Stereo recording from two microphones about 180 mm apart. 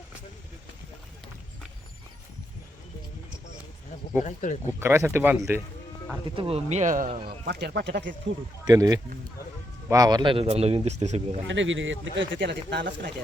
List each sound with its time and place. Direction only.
4.2 s speech: 45° left (ahead or behind)
4.8 s speech: 15° right (ahead or behind)
6.3 s a man's voice: 30° right (ahead or behind); by 7.3 s 45° right (ahead or behind)
7.4 s speech: 70° right (ahead or behind)
8.6 s a man's voice: 20° right (ahead or behind); by 11.3 s 40° right (ahead or behind)
11.4 s speech: 90° right; by 13.1 s 75° right (ahead or behind)